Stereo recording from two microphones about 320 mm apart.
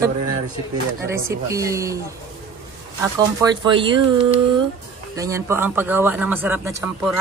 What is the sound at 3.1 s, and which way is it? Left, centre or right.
Speech, centre.